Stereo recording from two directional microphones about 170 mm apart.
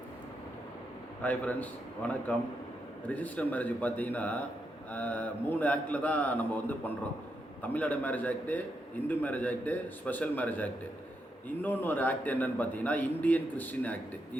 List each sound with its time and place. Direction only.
1.2 s a man's voice: 10° left (ahead or behind)